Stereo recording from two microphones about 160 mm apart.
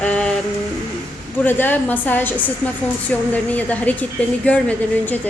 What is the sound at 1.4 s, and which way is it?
A woman's voice, 10° left (ahead or behind).